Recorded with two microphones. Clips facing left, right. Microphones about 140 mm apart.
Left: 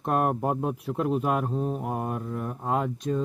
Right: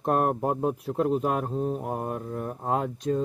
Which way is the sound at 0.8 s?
35° right (ahead or behind).